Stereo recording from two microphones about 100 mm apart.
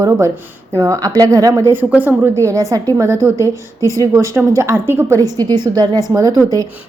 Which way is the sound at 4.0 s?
30° right (ahead or behind).